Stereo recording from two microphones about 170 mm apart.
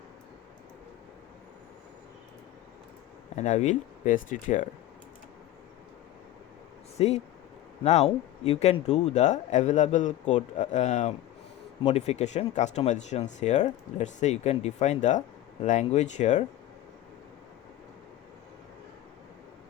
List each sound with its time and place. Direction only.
3.3 s speech: 45° left (ahead or behind)
7.0 s speech: 35° left (ahead or behind)